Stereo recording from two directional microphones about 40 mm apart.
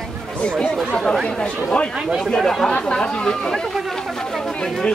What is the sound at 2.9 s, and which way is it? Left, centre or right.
Chatter, left.